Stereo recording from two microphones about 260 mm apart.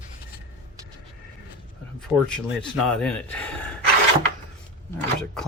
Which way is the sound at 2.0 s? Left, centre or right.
Centre.